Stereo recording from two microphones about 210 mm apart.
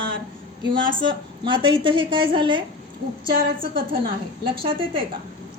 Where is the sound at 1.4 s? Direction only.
20° right (ahead or behind).